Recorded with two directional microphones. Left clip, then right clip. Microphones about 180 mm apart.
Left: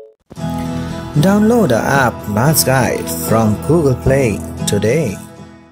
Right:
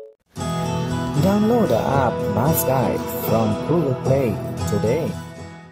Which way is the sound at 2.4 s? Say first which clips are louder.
Left 7 dB; centre (ahead or behind).